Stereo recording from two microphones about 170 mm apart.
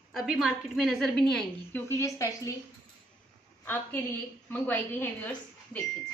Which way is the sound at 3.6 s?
15° left (ahead or behind).